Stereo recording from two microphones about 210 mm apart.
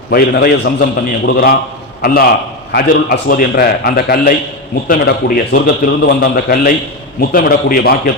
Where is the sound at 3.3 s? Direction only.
45° left (ahead or behind).